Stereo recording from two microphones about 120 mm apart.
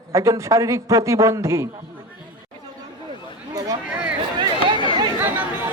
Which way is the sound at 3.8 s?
10° right (ahead or behind).